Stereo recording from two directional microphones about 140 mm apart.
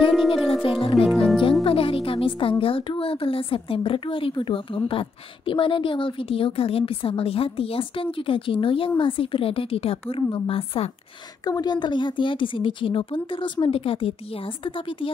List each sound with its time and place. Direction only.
0.3 s music: 40° left (ahead or behind)
1.1 s music: centre (ahead or behind)
1.6 s music: 40° left (ahead or behind)
2.6 s a woman's voice: 40° left (ahead or behind)
11.4 s a woman's voice: 30° left (ahead or behind)